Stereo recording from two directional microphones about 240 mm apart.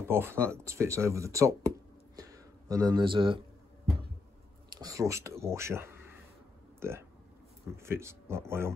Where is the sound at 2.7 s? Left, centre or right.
Centre.